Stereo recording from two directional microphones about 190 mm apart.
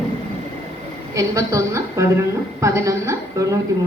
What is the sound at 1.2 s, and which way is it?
A woman's voice, 15° right (ahead or behind).